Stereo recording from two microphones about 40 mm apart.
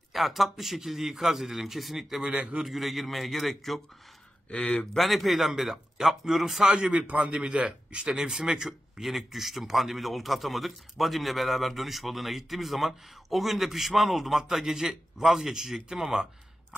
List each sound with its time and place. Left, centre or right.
0.1 s speech: centre
4.5 s speech: left
4.9 s speech: centre
6.9 s a man's voice: right
8.2 s a man's voice: centre